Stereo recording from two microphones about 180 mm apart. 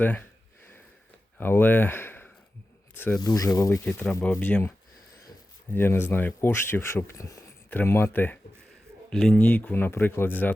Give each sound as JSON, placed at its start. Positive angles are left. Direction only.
{"t": 0.0, "sound": "speech", "side_deg": 10}
{"t": 1.4, "sound": "speech", "side_deg": 10}
{"t": 3.8, "sound": "speech", "side_deg": 5}
{"t": 5.7, "sound": "speech", "side_deg": 10}